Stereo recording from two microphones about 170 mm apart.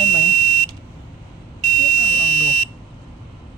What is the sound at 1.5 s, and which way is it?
Buzzer, 50° right (ahead or behind).